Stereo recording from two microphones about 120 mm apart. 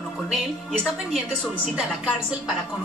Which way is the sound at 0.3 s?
Centre (ahead or behind).